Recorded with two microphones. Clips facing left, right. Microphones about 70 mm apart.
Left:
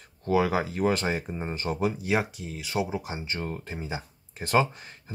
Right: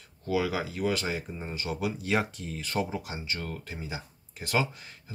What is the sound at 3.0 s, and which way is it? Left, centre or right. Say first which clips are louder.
Speech: left 3 dB; left.